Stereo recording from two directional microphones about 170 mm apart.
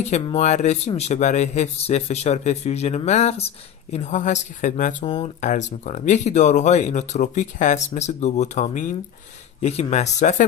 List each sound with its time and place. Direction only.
0.0 s speech: 40° left (ahead or behind)